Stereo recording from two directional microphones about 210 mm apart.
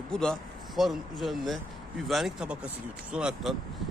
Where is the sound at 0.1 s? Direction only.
5° left (ahead or behind).